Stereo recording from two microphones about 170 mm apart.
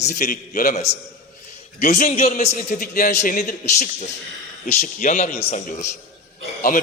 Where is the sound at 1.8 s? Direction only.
50° left (ahead or behind).